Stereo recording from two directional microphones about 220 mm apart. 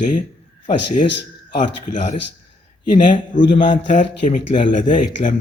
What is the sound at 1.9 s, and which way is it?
Speech, 30° left (ahead or behind).